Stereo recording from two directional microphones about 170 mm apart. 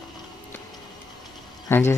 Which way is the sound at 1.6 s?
15° left (ahead or behind).